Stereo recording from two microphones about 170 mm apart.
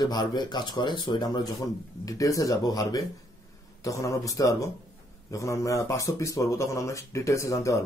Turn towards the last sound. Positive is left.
turn(degrees=20)  # may be behind; listen again after turning